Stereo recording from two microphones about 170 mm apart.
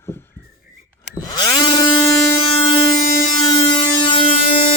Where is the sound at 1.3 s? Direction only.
25° left (ahead or behind).